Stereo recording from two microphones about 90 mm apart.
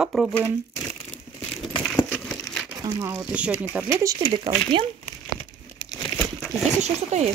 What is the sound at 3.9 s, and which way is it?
Speech, 40° right (ahead or behind).